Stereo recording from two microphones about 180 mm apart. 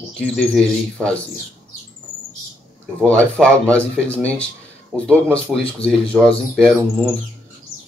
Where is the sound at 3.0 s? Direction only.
10° left (ahead or behind).